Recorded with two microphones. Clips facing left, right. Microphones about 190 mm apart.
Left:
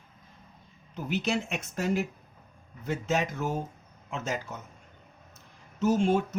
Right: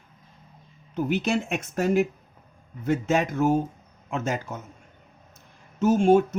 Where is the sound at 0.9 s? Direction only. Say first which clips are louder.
Right 5 dB; 55° right (ahead or behind).